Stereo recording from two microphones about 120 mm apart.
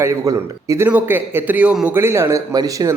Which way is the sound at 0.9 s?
15° right (ahead or behind).